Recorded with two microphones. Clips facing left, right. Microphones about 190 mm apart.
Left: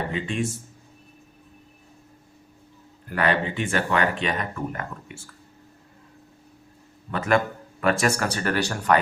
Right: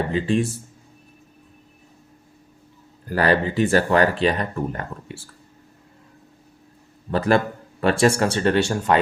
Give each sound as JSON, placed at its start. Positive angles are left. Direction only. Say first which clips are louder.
{"t": 0.1, "sound": "speech", "louder": "right 6 dB", "side_deg": -35}
{"t": 3.1, "sound": "speech", "louder": "right 4 dB", "side_deg": -35}
{"t": 7.1, "sound": "speech", "louder": "right 3 dB", "side_deg": -35}